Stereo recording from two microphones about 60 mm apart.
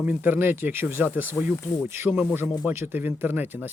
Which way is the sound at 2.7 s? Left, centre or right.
Right.